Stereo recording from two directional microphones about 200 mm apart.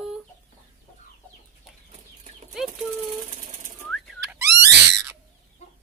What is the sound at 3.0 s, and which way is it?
Jackhammer, 35° right (ahead or behind).